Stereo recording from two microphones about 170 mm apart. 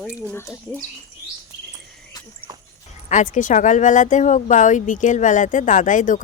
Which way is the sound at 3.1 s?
45° left (ahead or behind).